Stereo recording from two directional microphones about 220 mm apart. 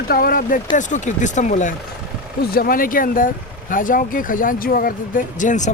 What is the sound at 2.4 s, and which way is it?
Speech, 45° left (ahead or behind).